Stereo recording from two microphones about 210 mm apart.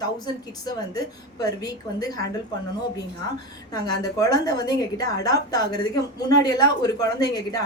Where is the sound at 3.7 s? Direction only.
15° left (ahead or behind).